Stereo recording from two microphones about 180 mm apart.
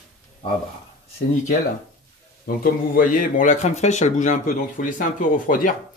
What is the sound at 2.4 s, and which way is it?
Speech, 55° left (ahead or behind).